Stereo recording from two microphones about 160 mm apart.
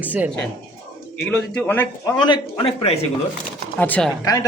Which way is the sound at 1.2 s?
10° left (ahead or behind).